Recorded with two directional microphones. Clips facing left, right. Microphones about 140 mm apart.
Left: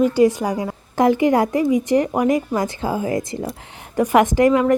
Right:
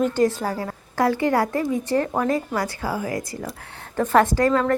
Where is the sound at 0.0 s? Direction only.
10° left (ahead or behind).